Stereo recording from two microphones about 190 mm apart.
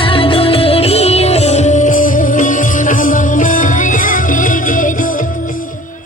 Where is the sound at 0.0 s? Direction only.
30° left (ahead or behind); by 5.6 s 45° left (ahead or behind).